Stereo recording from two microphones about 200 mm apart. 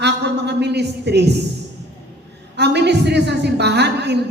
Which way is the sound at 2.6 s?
55° right (ahead or behind).